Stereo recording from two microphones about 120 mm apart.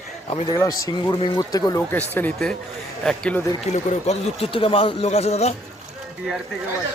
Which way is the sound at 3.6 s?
70° left (ahead or behind).